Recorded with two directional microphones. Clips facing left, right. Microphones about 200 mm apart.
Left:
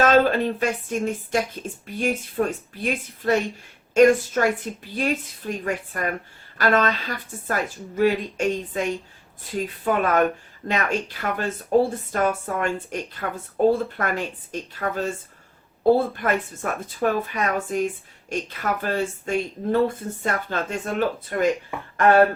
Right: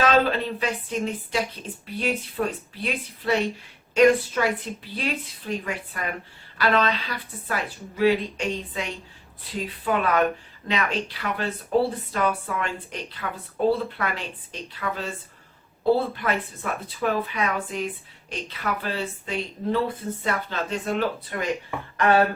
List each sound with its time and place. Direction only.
0.0 s speech: 45° left (ahead or behind)